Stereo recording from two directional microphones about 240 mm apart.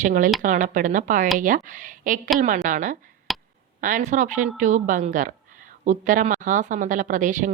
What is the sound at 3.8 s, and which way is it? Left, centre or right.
A woman's voice, right.